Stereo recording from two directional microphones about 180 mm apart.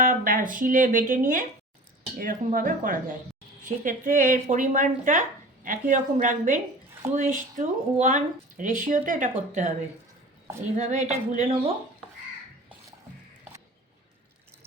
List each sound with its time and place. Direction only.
0.0 s speech: 50° right (ahead or behind)
10.8 s a woman's voice: 40° right (ahead or behind)